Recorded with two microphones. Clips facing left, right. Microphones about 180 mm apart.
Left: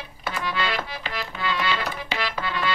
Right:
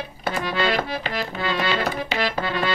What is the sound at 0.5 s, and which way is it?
Accordion, 40° right (ahead or behind).